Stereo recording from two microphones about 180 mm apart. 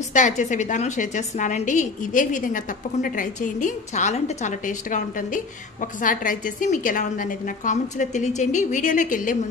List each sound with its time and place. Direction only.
0.1 s a woman's voice: 45° left (ahead or behind)